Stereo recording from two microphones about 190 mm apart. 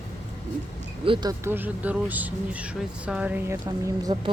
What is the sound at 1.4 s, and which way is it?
Speech, 10° right (ahead or behind).